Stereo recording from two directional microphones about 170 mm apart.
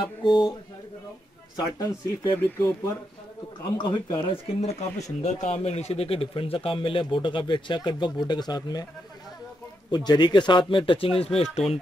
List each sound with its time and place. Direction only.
0.0 s a man's voice: 30° left (ahead or behind)
1.8 s speech: 15° left (ahead or behind)
3.7 s a man's voice: 30° left (ahead or behind)
9.8 s a man's voice: 25° left (ahead or behind)